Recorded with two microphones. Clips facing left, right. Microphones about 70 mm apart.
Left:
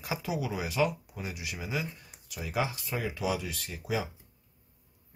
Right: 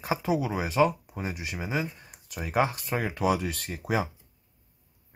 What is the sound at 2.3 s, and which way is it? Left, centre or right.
Speech, right.